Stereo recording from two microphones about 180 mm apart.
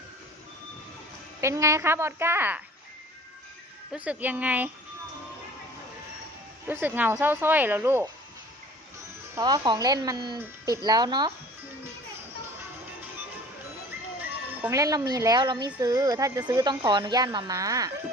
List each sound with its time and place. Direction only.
1.4 s a woman's voice: 15° right (ahead or behind)
3.9 s a woman's voice: 5° right (ahead or behind)
6.7 s a woman's voice: 10° right (ahead or behind)
9.3 s speech: 20° right (ahead or behind)
14.2 s speech: 15° right (ahead or behind)